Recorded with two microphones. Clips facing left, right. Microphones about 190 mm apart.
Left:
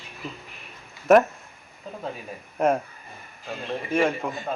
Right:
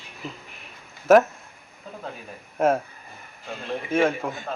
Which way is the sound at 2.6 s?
Centre (ahead or behind).